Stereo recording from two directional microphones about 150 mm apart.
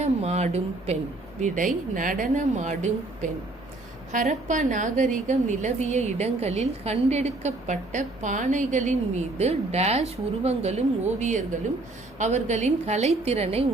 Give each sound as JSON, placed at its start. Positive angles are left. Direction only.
{"t": 0.0, "sound": "speech", "side_deg": -45}
{"t": 1.4, "sound": "a woman's voice", "side_deg": -60}